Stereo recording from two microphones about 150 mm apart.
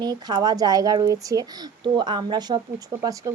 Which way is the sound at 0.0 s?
25° right (ahead or behind).